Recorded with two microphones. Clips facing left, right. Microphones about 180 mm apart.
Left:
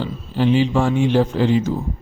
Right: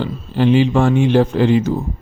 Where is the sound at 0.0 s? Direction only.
65° right (ahead or behind).